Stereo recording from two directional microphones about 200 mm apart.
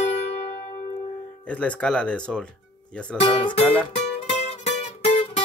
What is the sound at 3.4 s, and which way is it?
Music, 30° left (ahead or behind).